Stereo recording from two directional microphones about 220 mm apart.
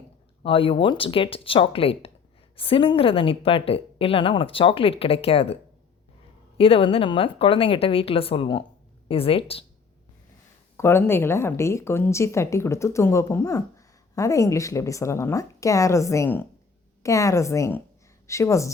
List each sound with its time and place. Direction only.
0.4 s a woman's voice: 25° left (ahead or behind)
6.6 s a woman's voice: 25° left (ahead or behind)
10.8 s a woman's voice: 10° left (ahead or behind)